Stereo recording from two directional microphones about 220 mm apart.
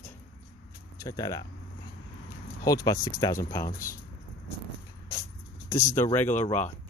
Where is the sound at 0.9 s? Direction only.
15° left (ahead or behind).